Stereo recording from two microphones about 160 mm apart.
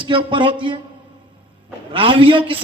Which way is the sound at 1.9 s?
35° right (ahead or behind).